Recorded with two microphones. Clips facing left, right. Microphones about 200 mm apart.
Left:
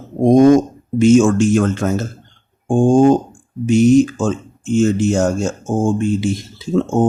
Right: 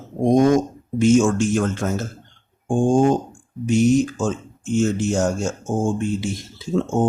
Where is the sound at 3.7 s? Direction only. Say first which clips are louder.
Left 6 dB; 90° left.